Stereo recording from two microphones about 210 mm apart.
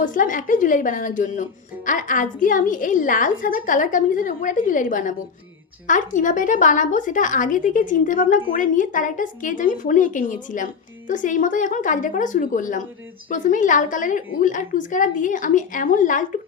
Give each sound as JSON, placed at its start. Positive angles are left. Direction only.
{"t": 0.0, "sound": "a woman's voice", "side_deg": 40}